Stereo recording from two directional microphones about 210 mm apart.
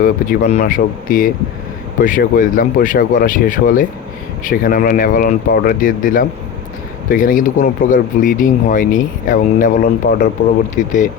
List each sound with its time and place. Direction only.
0.0 s speech: 40° left (ahead or behind)